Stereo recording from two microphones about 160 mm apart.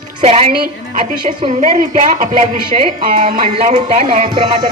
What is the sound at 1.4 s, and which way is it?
A woman's voice, 50° right (ahead or behind).